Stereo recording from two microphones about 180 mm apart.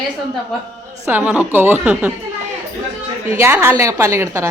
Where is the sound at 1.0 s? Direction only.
10° right (ahead or behind).